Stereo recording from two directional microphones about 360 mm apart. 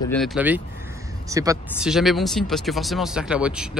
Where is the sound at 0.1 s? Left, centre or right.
Centre.